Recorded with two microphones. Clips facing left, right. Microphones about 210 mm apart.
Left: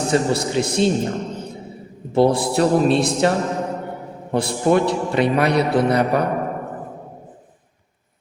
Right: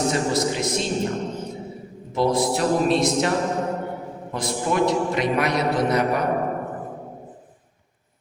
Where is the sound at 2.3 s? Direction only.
30° left (ahead or behind).